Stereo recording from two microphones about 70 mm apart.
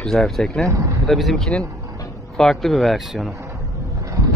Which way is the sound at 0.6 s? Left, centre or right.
Right.